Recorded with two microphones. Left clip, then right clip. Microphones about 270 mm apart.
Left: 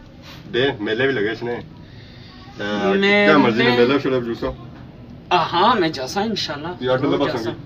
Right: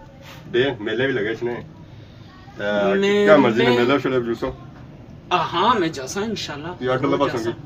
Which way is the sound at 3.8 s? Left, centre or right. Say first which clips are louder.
Left 2 dB; centre.